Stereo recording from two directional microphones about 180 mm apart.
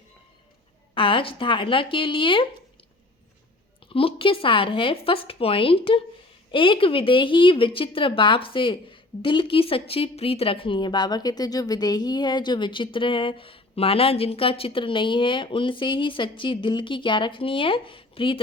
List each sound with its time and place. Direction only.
0.9 s a woman's voice: 30° left (ahead or behind)
3.9 s a woman's voice: 30° left (ahead or behind)